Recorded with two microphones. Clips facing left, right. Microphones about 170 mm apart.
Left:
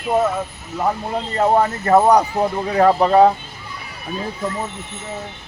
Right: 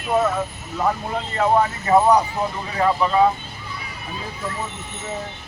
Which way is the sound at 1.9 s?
60° left (ahead or behind).